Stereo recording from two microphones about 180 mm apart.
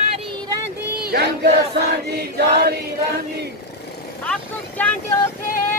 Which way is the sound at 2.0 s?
60° right (ahead or behind).